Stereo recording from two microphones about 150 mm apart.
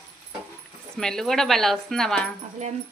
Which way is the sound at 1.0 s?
5° left (ahead or behind).